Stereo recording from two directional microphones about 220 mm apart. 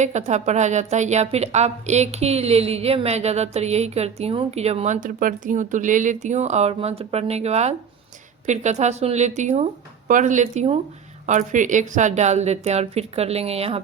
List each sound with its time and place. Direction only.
0.0 s a woman's voice: 30° right (ahead or behind)